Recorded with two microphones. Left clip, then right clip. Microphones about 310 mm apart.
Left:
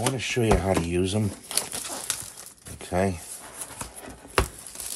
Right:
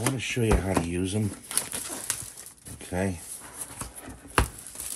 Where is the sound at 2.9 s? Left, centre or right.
Left.